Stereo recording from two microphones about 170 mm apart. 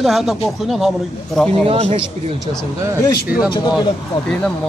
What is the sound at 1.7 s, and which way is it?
Speech, 35° right (ahead or behind).